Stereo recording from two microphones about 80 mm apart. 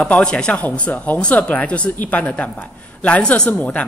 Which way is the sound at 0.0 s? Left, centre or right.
Centre.